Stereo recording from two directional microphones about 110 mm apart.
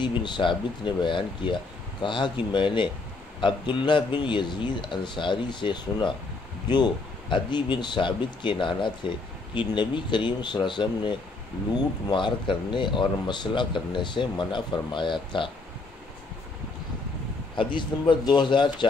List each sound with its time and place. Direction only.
0.0 s speech: 45° left (ahead or behind)
17.6 s speech: 45° left (ahead or behind)